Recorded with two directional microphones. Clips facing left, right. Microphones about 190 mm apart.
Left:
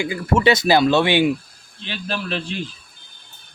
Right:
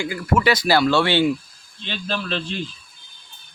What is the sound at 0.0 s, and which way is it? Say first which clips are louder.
A man's voice: left 2 dB; 20° left (ahead or behind).